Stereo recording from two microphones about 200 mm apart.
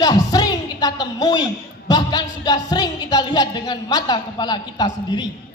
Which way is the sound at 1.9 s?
20° left (ahead or behind).